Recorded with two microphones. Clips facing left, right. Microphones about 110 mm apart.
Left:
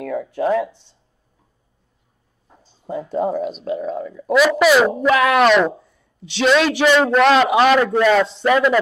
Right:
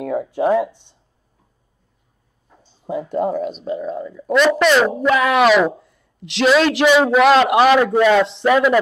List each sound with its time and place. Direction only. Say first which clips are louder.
0.0 s speech: right 2 dB; 20° right (ahead or behind)
2.9 s a man's voice: right 1 dB; 5° right (ahead or behind)